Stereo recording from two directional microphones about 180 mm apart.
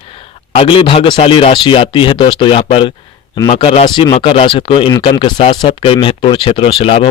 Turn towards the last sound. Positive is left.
turn(degrees=30)  # may be behind; listen again after turning